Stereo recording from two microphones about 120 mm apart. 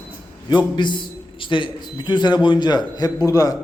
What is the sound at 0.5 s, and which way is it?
A man's voice, 40° left (ahead or behind).